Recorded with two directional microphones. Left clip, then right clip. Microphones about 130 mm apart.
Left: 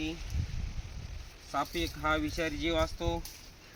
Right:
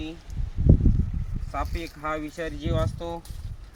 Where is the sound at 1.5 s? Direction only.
10° right (ahead or behind).